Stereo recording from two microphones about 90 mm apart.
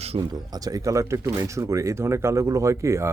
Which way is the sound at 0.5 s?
45° right (ahead or behind).